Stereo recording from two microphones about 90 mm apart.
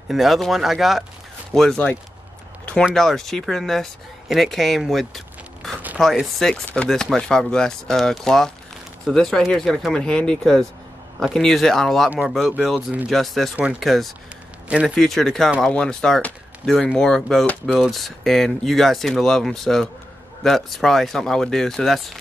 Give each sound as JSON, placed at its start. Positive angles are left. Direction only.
{"t": 0.1, "sound": "speech", "side_deg": 0}
{"t": 2.6, "sound": "a sound", "side_deg": 15}
{"t": 2.9, "sound": "speech", "side_deg": 5}